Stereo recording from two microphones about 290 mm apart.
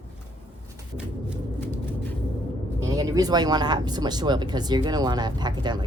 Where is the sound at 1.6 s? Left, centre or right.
Centre.